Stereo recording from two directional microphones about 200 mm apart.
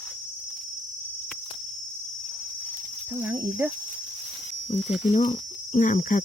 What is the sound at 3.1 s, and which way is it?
Cricket, 10° right (ahead or behind).